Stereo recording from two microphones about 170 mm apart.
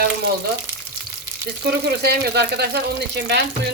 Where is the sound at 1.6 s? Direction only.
70° right (ahead or behind).